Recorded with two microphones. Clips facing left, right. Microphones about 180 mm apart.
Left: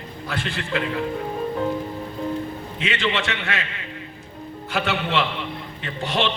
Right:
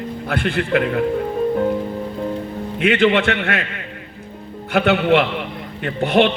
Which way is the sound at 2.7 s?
60° right (ahead or behind).